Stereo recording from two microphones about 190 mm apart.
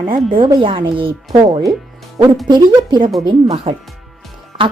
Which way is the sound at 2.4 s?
25° right (ahead or behind).